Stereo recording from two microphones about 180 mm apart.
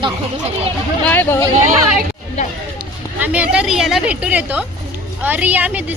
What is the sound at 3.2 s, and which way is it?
A woman's voice, 5° right (ahead or behind).